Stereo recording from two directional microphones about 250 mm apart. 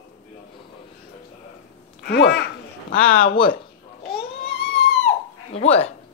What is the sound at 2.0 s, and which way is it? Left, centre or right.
Speech, left.